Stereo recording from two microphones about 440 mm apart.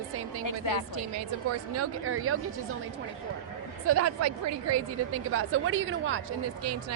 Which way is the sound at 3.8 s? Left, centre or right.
Right.